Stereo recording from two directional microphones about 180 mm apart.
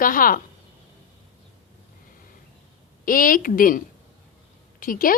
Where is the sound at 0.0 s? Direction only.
50° left (ahead or behind).